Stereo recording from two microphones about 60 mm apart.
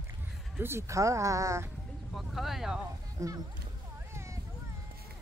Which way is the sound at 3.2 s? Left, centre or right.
Right.